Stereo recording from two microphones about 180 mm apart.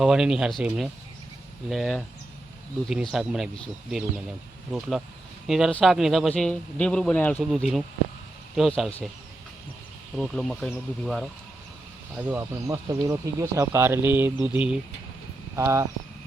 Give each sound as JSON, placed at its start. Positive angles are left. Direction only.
{"t": 0.0, "sound": "a man's voice", "side_deg": -5}
{"t": 4.7, "sound": "a man's voice", "side_deg": 0}
{"t": 10.2, "sound": "a man's voice", "side_deg": 0}
{"t": 12.1, "sound": "speech", "side_deg": -10}